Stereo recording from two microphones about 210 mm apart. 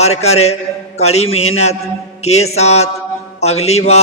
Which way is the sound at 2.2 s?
30° left (ahead or behind).